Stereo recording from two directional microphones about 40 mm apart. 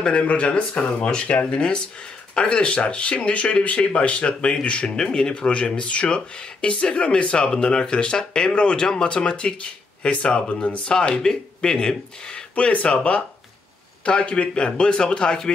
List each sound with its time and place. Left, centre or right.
0.0 s speech: left
12.5 s speech: left